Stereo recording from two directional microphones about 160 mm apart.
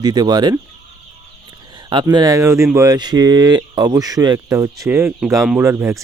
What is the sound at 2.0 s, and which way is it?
Speech, 20° right (ahead or behind).